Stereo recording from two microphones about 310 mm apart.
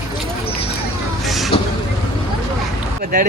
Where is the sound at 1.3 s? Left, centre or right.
Centre.